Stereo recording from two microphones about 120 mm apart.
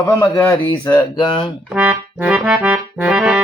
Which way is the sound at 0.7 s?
35° left (ahead or behind).